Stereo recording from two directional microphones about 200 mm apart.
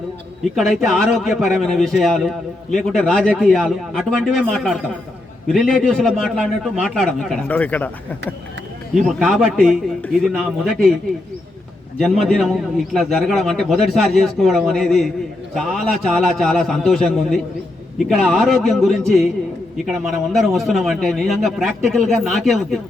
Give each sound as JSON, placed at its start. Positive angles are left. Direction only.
{"t": 0.5, "sound": "a man's voice", "side_deg": 0}
{"t": 9.0, "sound": "a man's voice", "side_deg": 0}
{"t": 11.9, "sound": "a man's voice", "side_deg": 0}
{"t": 20.3, "sound": "a man's voice", "side_deg": 0}